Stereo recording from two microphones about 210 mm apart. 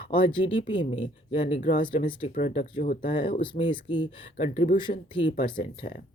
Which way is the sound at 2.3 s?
40° left (ahead or behind).